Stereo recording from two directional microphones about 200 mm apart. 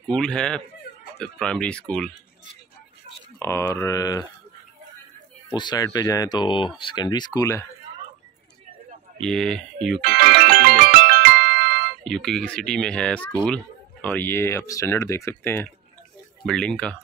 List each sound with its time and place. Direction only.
0.1 s speech: 5° left (ahead or behind)
3.3 s speech: 15° left (ahead or behind)
5.5 s speech: 20° left (ahead or behind)
9.2 s speech: 5° left (ahead or behind)
10.0 s music: 50° right (ahead or behind)
12.0 s speech: 5° left (ahead or behind)